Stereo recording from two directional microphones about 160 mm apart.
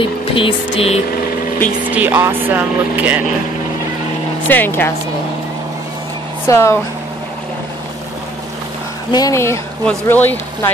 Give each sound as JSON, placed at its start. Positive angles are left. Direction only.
{"t": 0.0, "sound": "a sound", "side_deg": 35}
{"t": 1.9, "sound": "speech", "side_deg": -10}
{"t": 4.5, "sound": "speech", "side_deg": 10}
{"t": 6.4, "sound": "speech", "side_deg": 20}
{"t": 9.1, "sound": "speech", "side_deg": 20}